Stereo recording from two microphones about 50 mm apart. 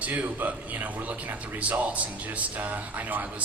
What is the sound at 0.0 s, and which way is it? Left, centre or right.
A man's voice, right.